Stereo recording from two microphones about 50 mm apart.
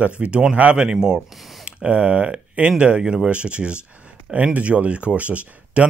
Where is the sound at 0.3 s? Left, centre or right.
Right.